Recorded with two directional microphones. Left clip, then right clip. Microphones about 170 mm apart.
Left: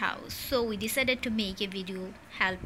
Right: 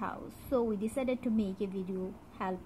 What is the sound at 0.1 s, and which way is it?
Speech, 20° left (ahead or behind).